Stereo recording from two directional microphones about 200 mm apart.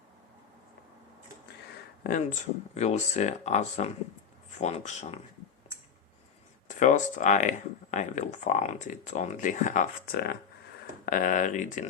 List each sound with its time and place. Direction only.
2.0 s speech: 40° left (ahead or behind)
6.7 s speech: 35° left (ahead or behind)